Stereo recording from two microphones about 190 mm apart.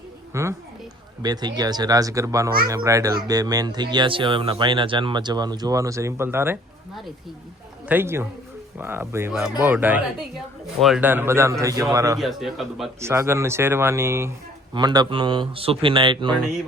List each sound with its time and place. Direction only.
0.3 s speech: 15° right (ahead or behind)
7.9 s speech: 10° right (ahead or behind)
12.2 s a man's voice: centre (ahead or behind)
13.0 s speech: 15° right (ahead or behind)